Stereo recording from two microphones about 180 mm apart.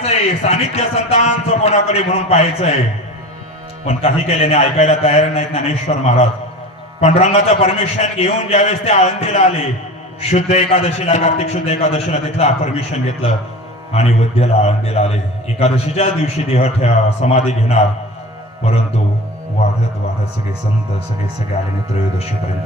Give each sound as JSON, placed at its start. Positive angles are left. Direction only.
{"t": 0.0, "sound": "a man's voice", "side_deg": 35}
{"t": 3.8, "sound": "a man's voice", "side_deg": 35}